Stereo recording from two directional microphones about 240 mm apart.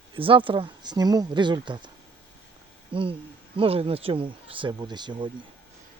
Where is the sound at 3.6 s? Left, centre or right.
Right.